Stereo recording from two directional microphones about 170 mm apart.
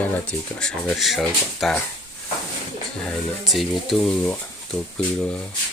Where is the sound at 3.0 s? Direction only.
5° left (ahead or behind).